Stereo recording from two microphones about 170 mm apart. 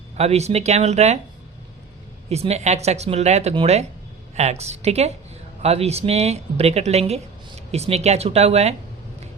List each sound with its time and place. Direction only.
0.2 s speech: 40° right (ahead or behind)
2.3 s speech: 40° right (ahead or behind)